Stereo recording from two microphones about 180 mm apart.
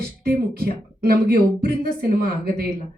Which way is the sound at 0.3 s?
55° right (ahead or behind).